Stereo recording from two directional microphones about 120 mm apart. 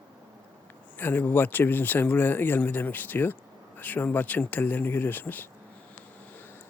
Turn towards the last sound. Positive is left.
turn(degrees=15)  # may be behind; listen again after turning